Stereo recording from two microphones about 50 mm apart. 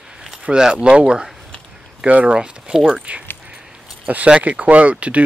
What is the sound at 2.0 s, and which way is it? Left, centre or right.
Speech, right.